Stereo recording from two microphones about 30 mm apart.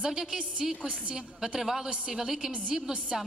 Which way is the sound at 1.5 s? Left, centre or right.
Centre.